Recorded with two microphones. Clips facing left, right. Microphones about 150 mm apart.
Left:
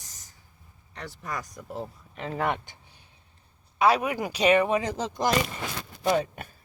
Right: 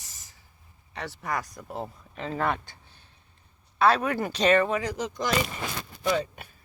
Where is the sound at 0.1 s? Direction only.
90° right.